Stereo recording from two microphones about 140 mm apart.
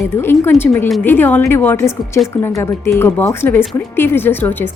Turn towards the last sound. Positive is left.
turn(degrees=15)  # may be behind; listen again after turning